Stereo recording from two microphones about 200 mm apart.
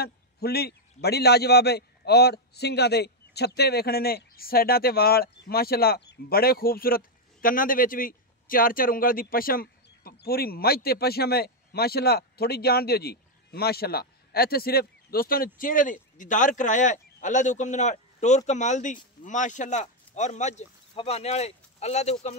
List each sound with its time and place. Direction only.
0.0 s a man's voice: 50° left (ahead or behind); by 22.3 s 35° left (ahead or behind)